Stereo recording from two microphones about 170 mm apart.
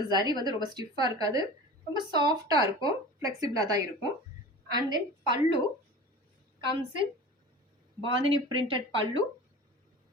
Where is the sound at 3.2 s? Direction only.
20° right (ahead or behind).